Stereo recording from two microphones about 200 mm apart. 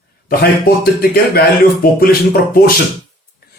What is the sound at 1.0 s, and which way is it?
Speech, 50° left (ahead or behind).